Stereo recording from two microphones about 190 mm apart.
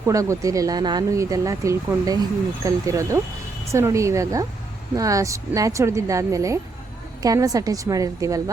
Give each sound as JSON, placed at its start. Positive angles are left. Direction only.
{"t": 0.0, "sound": "speech", "side_deg": -15}